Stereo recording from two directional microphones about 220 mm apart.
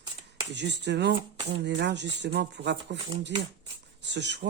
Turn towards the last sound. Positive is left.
turn(degrees=-50)  # may be behind; listen again after turning